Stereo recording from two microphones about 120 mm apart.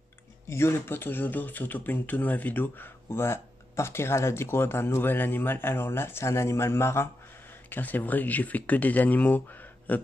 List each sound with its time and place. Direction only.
0.5 s speech: 20° left (ahead or behind)